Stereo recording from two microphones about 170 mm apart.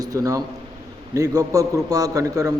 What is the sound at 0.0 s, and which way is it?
A man's voice, 20° right (ahead or behind).